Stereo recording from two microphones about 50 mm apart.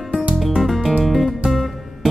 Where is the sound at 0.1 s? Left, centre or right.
Right.